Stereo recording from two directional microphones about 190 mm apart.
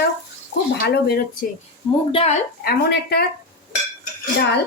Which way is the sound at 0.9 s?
55° left (ahead or behind).